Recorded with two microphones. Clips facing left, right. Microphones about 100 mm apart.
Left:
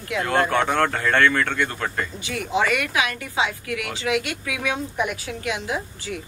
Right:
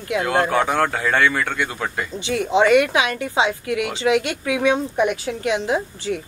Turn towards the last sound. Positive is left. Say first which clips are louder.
# right 6 dB
turn(degrees=-30)  # may be behind; listen again after turning